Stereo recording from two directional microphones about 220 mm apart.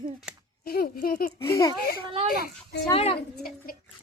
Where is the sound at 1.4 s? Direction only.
15° left (ahead or behind).